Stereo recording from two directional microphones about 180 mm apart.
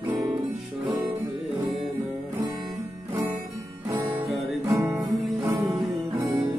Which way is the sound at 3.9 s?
15° right (ahead or behind).